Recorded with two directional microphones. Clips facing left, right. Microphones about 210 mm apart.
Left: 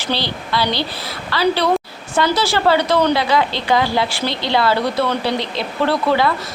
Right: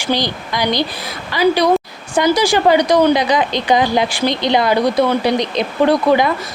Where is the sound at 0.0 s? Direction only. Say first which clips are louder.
Right 4 dB; 15° right (ahead or behind).